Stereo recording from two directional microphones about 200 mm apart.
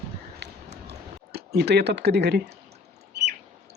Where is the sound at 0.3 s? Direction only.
55° right (ahead or behind).